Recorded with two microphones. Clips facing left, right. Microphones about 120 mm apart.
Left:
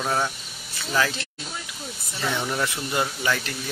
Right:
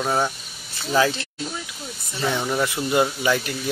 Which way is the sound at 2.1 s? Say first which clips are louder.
Right 4 dB; 10° right (ahead or behind).